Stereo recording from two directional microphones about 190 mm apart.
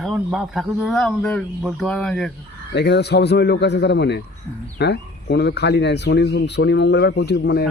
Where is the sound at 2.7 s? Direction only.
60° left (ahead or behind).